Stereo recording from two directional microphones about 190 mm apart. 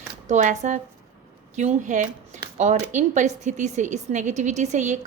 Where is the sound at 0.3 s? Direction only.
40° right (ahead or behind).